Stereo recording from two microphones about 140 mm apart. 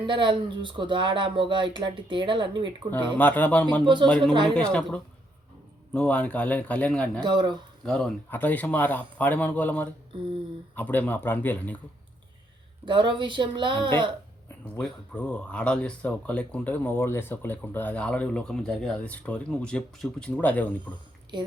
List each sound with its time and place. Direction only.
0.0 s speech: 35° right (ahead or behind)
2.9 s speech: 15° left (ahead or behind)
7.2 s speech: 30° right (ahead or behind)
7.9 s speech: 5° left (ahead or behind)
12.8 s speech: 35° right (ahead or behind)
14.8 s speech: 10° left (ahead or behind)
21.3 s speech: 30° right (ahead or behind)